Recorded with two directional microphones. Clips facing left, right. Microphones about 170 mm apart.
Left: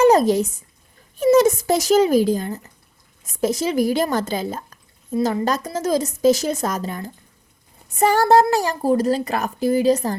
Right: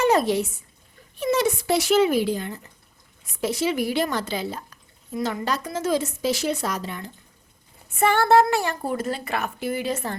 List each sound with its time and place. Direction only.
0.0 s speech: 40° left (ahead or behind)
5.1 s speech: 35° left (ahead or behind)